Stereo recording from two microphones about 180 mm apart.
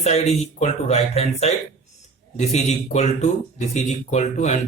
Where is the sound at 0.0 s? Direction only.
35° left (ahead or behind).